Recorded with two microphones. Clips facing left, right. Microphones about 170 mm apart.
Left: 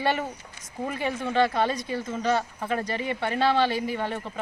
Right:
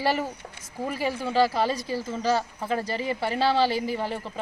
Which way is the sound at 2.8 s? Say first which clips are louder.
Right 1 dB; 30° right (ahead or behind).